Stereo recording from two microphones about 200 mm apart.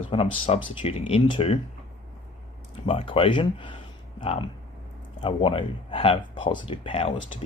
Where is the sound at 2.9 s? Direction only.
25° left (ahead or behind).